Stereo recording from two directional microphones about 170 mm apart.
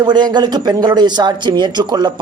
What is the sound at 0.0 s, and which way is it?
Speech, 25° right (ahead or behind).